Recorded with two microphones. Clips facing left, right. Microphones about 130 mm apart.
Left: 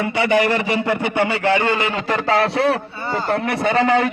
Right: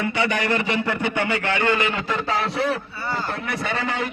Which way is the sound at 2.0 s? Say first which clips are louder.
Left 6 dB; 75° left (ahead or behind).